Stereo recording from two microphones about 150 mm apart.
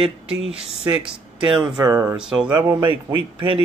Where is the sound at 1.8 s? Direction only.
20° right (ahead or behind).